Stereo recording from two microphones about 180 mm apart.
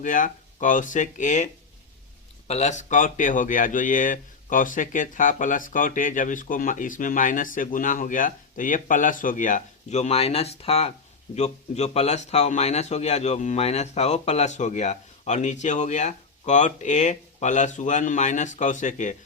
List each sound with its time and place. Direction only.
0.0 s speech: 45° left (ahead or behind)
2.5 s a man's voice: 40° left (ahead or behind)